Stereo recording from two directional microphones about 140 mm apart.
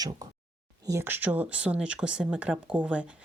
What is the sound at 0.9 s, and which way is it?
Speech, 15° right (ahead or behind).